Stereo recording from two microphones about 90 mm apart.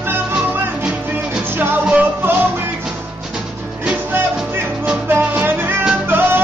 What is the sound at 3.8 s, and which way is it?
Music, 15° right (ahead or behind).